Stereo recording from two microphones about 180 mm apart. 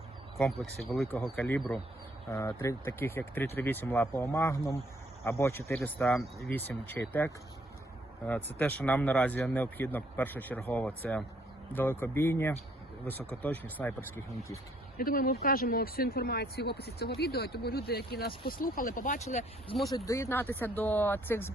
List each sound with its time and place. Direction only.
0.6 s speech: centre (ahead or behind)
6.0 s speech: centre (ahead or behind)
8.3 s speech: 10° left (ahead or behind)
14.9 s speech: 55° left (ahead or behind)
20.1 s speech: 15° left (ahead or behind)